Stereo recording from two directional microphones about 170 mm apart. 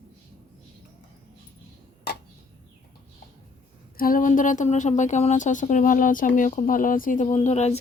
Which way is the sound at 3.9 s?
55° left (ahead or behind).